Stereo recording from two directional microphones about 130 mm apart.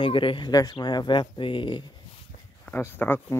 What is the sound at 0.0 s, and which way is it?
Speech, 40° left (ahead or behind).